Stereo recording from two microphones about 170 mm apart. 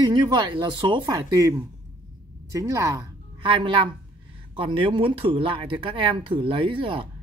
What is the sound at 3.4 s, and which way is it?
Speech, 30° right (ahead or behind).